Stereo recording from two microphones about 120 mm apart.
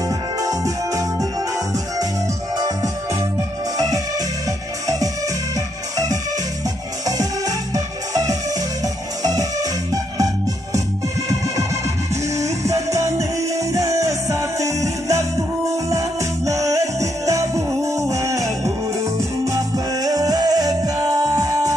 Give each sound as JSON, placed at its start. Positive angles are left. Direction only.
{"t": 0.4, "sound": "music", "side_deg": -30}
{"t": 2.5, "sound": "music", "side_deg": -30}
{"t": 7.1, "sound": "music", "side_deg": -30}
{"t": 12.4, "sound": "music", "side_deg": -25}